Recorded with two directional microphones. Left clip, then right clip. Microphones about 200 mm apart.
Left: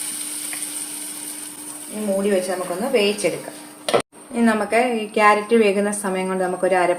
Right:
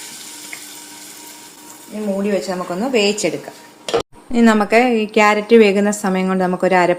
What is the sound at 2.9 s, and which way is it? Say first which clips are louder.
Speech: right 2 dB; 55° right (ahead or behind).